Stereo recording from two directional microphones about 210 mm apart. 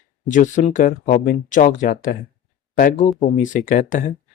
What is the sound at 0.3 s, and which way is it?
Speech, 35° left (ahead or behind).